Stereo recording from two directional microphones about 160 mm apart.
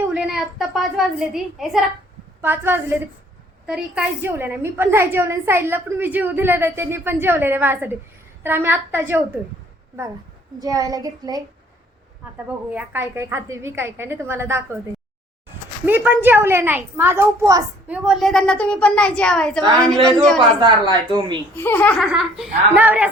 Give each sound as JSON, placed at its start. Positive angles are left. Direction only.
{"t": 0.1, "sound": "a woman's voice", "side_deg": -5}
{"t": 2.4, "sound": "a woman's voice", "side_deg": -15}
{"t": 10.6, "sound": "a child's voice", "side_deg": -20}
{"t": 12.7, "sound": "a woman's voice", "side_deg": -15}
{"t": 15.9, "sound": "a woman's voice", "side_deg": -10}
{"t": 17.8, "sound": "a woman's voice", "side_deg": -5}
{"t": 20.6, "sound": "a child's voice", "side_deg": -25}
{"t": 21.5, "sound": "a child's voice", "side_deg": 10}
{"t": 22.0, "sound": "a woman's voice", "side_deg": -5}